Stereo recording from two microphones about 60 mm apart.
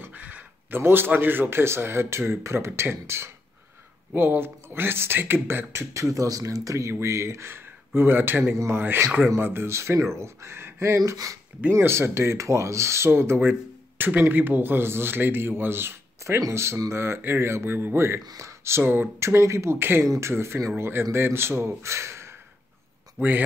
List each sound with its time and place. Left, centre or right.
0.0 s speech: right
17.9 s speech: right
19.1 s speech: right
23.2 s speech: right